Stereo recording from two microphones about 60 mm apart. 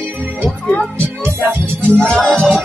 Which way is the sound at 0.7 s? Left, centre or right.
Left.